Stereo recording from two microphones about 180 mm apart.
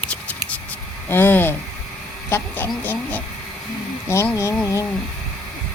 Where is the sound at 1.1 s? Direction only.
10° left (ahead or behind).